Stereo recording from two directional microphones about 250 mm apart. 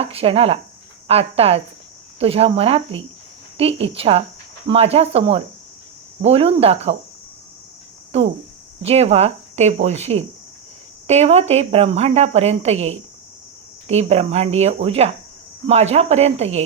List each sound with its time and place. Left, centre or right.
0.0 s a woman's voice: right
8.1 s a woman's voice: right